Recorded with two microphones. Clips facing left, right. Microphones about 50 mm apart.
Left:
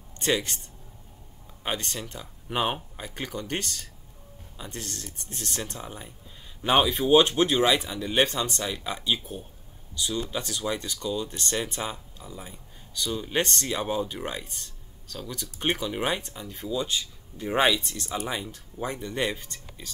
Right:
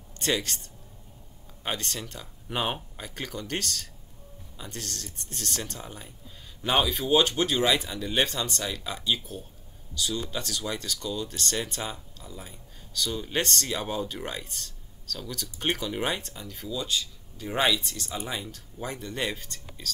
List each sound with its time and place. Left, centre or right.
0.2 s speech: centre
1.6 s speech: centre
16.4 s speech: centre